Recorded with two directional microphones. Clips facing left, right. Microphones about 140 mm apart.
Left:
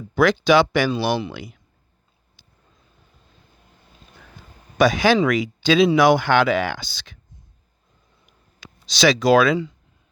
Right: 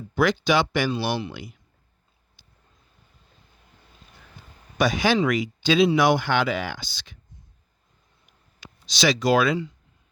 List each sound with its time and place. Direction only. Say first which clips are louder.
0.2 s speech: left 5 dB; 90° left
2.4 s vehicle: left 2 dB; 90° left
4.8 s speech: left 5 dB; 90° left
8.6 s speech: left 5 dB; 90° left